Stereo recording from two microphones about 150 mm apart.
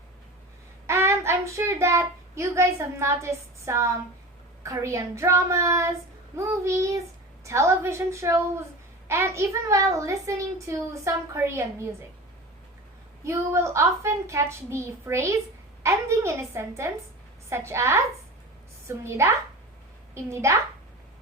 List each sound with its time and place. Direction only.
0.9 s child singing: 15° right (ahead or behind)
4.6 s a woman's voice: 20° right (ahead or behind)
13.2 s a woman's voice: 20° right (ahead or behind)